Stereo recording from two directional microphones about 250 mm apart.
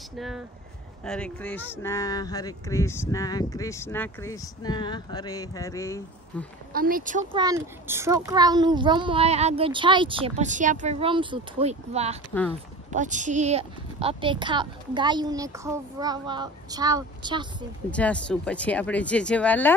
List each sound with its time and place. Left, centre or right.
1.0 s speech: centre
6.7 s speech: right
7.3 s a child's voice: centre
17.9 s speech: centre